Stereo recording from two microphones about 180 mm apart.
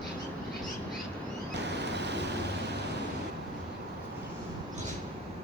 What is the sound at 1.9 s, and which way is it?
Vehicle, 70° right (ahead or behind).